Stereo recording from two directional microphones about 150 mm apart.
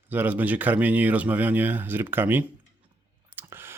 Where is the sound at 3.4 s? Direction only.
15° right (ahead or behind).